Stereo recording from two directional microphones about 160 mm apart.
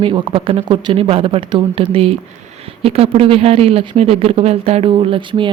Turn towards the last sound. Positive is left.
turn(degrees=-30)  # may be behind; listen again after turning